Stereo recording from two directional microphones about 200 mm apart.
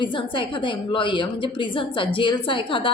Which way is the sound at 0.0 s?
25° left (ahead or behind).